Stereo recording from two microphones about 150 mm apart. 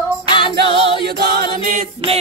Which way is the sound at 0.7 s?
35° left (ahead or behind).